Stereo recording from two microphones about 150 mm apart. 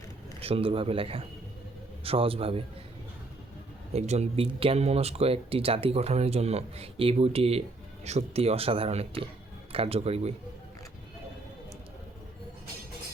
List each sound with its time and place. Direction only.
0.3 s speech: 40° right (ahead or behind)
3.9 s speech: 45° right (ahead or behind)